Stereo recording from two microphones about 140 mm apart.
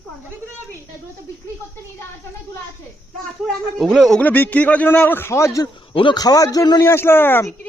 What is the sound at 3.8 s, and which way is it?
Speech, centre (ahead or behind).